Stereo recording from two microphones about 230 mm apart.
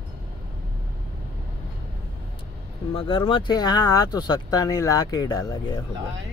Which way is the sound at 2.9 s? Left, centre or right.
Left.